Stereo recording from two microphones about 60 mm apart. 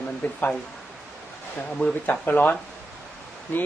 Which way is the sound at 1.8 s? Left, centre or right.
Left.